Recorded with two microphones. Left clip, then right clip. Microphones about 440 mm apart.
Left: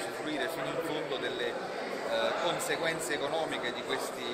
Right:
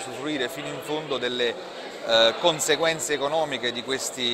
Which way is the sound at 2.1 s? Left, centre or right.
Right.